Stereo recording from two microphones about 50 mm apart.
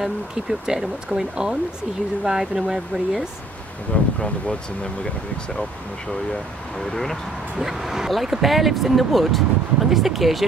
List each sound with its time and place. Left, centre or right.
0.0 s speech: centre
3.9 s speech: left
6.8 s speech: centre
7.5 s speech: centre